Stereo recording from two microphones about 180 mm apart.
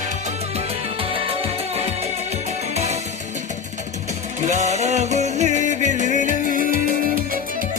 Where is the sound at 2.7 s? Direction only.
35° right (ahead or behind).